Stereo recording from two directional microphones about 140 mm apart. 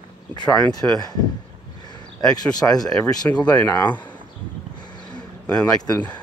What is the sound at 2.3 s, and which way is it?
Speech, 25° left (ahead or behind).